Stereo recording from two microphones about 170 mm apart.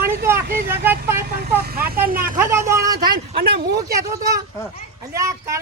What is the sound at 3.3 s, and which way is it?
Speech, 70° right (ahead or behind).